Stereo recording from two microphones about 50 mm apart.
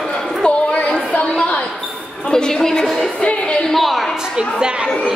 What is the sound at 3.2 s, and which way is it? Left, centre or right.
Music, left.